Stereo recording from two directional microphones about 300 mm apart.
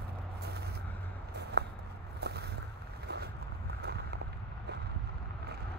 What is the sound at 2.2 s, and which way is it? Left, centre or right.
Boat, right.